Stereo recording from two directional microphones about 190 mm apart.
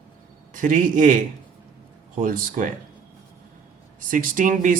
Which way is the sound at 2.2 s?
45° right (ahead or behind).